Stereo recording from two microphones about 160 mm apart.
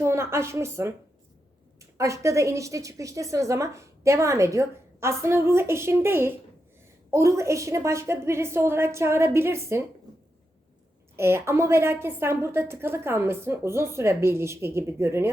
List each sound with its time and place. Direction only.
0.0 s a woman's voice: 15° right (ahead or behind)
11.2 s a woman's voice: 15° right (ahead or behind)